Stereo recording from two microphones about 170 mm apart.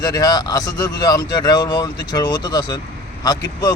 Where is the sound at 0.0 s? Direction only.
25° left (ahead or behind).